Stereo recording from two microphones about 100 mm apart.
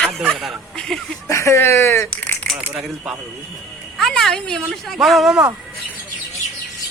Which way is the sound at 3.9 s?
5° left (ahead or behind).